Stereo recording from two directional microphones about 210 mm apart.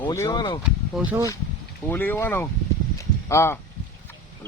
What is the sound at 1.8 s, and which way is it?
Speech, 10° left (ahead or behind).